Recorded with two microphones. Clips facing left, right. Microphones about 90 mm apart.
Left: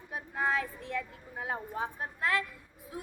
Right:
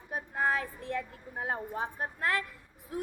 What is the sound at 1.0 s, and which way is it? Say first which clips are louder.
Speech: right 1 dB; 45° right (ahead or behind).